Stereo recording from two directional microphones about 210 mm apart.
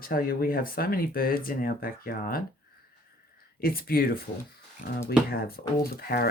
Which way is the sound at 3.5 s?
45° left (ahead or behind).